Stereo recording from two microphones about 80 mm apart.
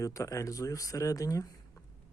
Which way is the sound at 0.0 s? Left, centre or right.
Left.